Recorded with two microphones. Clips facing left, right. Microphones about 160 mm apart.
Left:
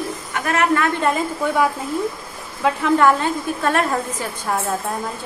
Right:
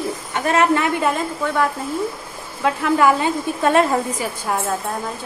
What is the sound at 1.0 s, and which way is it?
Speech, 5° left (ahead or behind).